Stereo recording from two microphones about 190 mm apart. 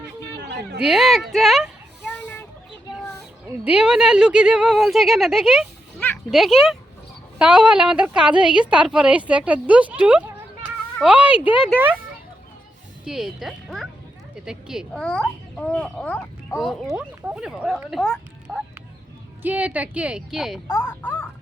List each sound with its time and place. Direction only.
0.3 s a sound: 60° right (ahead or behind)
0.8 s speech: centre (ahead or behind)
2.2 s a sound: 10° left (ahead or behind)
3.6 s a woman's voice: 5° right (ahead or behind)
11.3 s speech: 25° left (ahead or behind)
13.1 s a woman's voice: centre (ahead or behind)
20.7 s speech: 15° left (ahead or behind)